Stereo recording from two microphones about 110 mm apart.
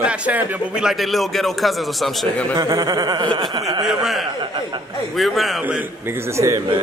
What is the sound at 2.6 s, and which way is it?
Speech, 35° right (ahead or behind).